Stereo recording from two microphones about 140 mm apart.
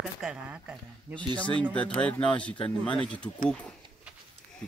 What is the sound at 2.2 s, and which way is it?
Speech, 35° left (ahead or behind).